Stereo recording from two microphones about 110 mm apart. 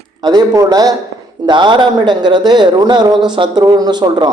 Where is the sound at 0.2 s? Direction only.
40° right (ahead or behind).